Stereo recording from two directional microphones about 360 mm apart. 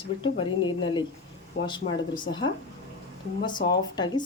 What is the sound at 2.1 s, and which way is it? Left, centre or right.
Speech, centre.